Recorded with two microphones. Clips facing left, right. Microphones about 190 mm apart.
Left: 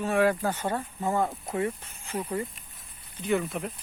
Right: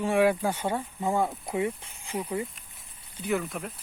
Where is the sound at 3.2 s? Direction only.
Centre (ahead or behind).